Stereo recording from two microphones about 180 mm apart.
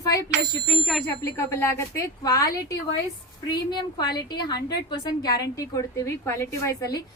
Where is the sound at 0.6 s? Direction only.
Centre (ahead or behind).